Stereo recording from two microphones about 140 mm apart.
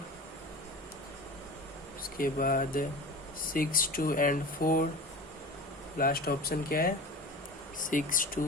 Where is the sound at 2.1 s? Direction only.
85° left.